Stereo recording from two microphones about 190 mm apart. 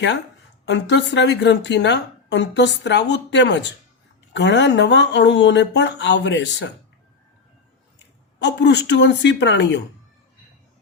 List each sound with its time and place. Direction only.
0.6 s a woman's voice: 65° left (ahead or behind)
8.4 s a woman's voice: 65° left (ahead or behind)